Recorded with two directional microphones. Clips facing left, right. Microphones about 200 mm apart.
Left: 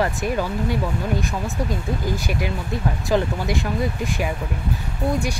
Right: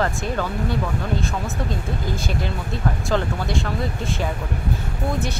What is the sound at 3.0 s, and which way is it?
Speech, 15° left (ahead or behind).